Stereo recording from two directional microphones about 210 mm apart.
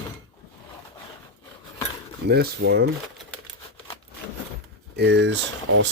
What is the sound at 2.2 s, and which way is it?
Speech, 50° right (ahead or behind).